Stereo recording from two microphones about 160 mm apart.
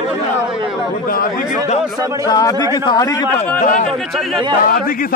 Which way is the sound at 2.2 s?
25° left (ahead or behind).